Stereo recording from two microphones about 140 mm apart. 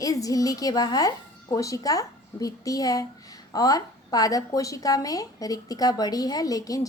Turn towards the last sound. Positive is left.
turn(degrees=25)  # may be behind; listen again after turning